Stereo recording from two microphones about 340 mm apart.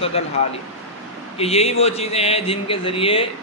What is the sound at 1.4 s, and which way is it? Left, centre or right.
A man's voice, centre.